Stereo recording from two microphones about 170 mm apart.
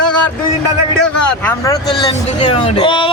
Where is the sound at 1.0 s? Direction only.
10° left (ahead or behind).